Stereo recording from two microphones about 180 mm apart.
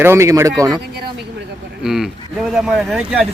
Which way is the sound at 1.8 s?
Centre (ahead or behind).